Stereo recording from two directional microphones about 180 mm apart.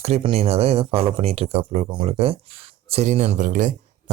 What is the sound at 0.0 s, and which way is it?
Speech, 35° right (ahead or behind).